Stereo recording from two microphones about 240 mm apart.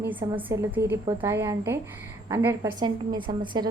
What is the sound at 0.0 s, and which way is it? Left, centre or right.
A woman's voice, centre.